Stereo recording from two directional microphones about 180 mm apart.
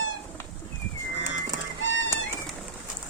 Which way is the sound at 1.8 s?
90° left.